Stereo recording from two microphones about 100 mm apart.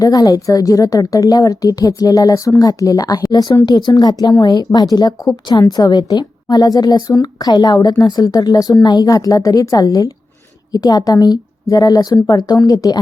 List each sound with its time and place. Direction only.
0.0 s a woman's voice: 40° left (ahead or behind)